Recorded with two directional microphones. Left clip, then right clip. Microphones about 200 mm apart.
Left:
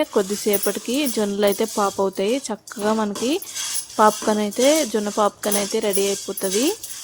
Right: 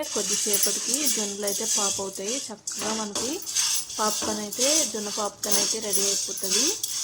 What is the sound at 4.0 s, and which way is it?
Speech, 45° left (ahead or behind).